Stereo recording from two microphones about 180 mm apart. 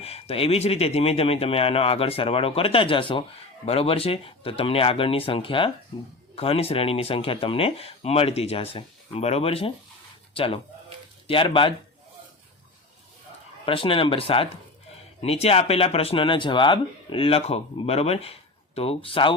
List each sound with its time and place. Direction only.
0.0 s speech: 35° left (ahead or behind)
13.7 s speech: 30° left (ahead or behind)